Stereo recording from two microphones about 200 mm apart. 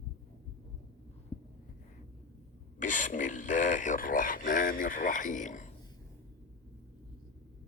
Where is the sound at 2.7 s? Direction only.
40° left (ahead or behind).